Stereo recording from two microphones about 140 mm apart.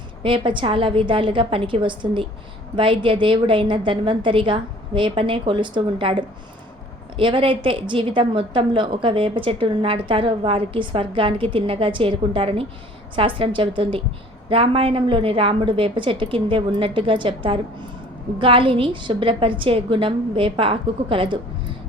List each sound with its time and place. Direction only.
0.2 s a woman's voice: 35° right (ahead or behind)